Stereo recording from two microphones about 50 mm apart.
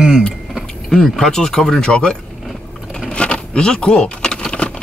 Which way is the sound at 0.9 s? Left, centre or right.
Centre.